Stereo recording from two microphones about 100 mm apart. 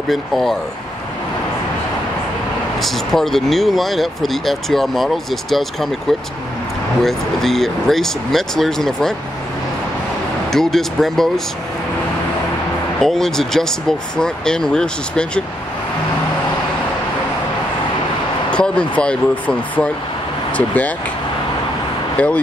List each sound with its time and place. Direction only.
0.1 s speech: centre (ahead or behind)
2.8 s speech: 5° left (ahead or behind)
7.0 s speech: centre (ahead or behind)
10.5 s speech: 5° left (ahead or behind)
13.0 s speech: 5° left (ahead or behind)
18.5 s speech: 10° left (ahead or behind)
22.1 s speech: 15° left (ahead or behind)